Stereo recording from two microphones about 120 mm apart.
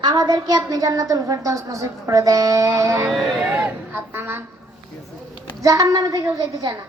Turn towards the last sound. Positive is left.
turn(degrees=-30)  # may be behind; listen again after turning